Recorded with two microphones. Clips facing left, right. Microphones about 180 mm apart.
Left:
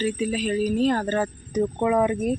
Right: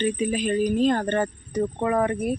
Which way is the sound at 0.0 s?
5° left (ahead or behind).